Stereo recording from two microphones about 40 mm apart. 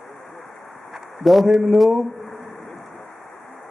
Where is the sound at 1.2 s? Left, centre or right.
Centre.